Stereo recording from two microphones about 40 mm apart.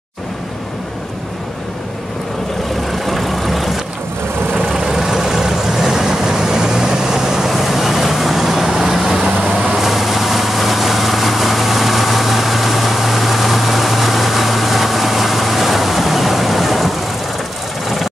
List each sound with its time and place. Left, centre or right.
2.9 s vehicle: centre
4.7 s vehicle: centre